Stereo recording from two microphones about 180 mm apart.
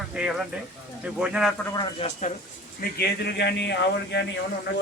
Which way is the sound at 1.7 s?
25° left (ahead or behind).